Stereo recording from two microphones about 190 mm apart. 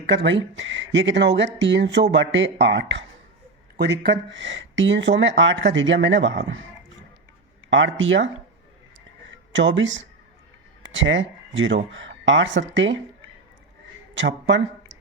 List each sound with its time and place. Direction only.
0.0 s speech: 65° right (ahead or behind)
7.7 s speech: 85° right
9.5 s speech: 75° right (ahead or behind)
14.1 s speech: 70° right (ahead or behind)